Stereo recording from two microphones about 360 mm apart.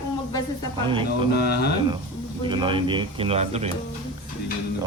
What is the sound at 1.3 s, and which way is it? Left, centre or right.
Speech, left.